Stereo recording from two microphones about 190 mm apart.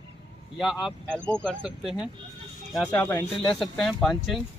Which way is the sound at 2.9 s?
10° left (ahead or behind).